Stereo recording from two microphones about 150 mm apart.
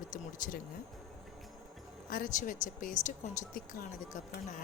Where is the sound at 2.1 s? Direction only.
65° left (ahead or behind).